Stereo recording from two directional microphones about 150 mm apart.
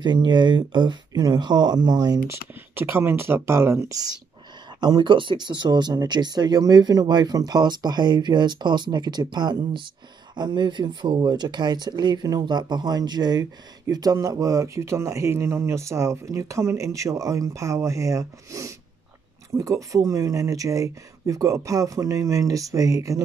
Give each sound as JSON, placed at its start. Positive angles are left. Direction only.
{"t": 0.0, "sound": "speech", "side_deg": -30}
{"t": 2.7, "sound": "speech", "side_deg": -15}